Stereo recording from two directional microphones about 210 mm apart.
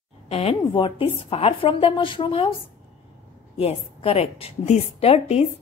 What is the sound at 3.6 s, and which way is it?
A woman's voice, 30° left (ahead or behind).